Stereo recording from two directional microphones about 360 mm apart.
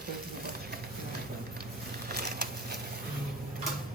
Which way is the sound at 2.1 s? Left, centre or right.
Right.